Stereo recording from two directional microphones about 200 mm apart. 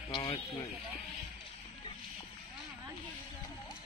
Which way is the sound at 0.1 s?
15° left (ahead or behind).